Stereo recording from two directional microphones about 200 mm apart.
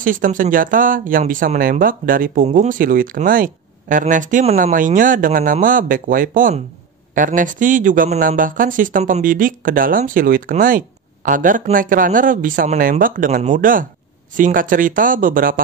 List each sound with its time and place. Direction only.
0.0 s speech: 40° right (ahead or behind)